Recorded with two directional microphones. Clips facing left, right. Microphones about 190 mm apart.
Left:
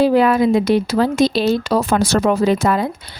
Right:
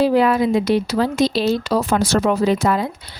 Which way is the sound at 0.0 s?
50° left (ahead or behind).